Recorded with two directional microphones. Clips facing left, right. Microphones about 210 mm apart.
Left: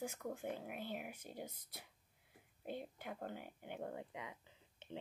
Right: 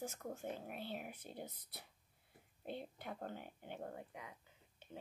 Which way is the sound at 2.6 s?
10° left (ahead or behind).